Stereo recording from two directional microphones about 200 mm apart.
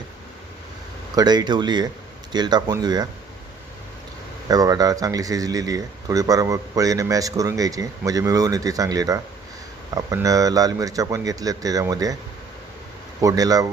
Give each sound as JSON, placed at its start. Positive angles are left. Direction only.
{"t": 1.1, "sound": "speech", "side_deg": -20}
{"t": 4.4, "sound": "speech", "side_deg": -20}
{"t": 13.2, "sound": "speech", "side_deg": -20}